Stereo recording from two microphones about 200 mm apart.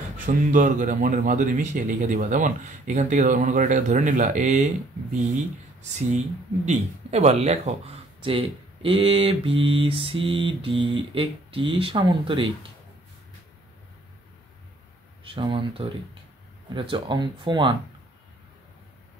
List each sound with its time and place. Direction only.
0.5 s speech: 40° right (ahead or behind)
5.8 s speech: 35° right (ahead or behind)
15.2 s speech: 25° right (ahead or behind)